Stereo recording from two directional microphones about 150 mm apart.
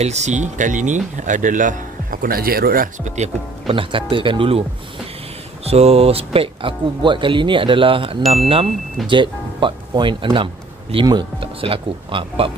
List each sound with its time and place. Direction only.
0.0 s speech: 50° right (ahead or behind)
3.6 s speech: 35° right (ahead or behind)
5.7 s speech: 45° right (ahead or behind)